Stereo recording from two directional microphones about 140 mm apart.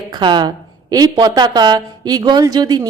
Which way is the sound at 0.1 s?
35° right (ahead or behind).